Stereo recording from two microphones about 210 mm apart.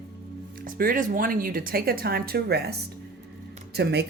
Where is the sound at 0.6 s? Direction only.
40° right (ahead or behind).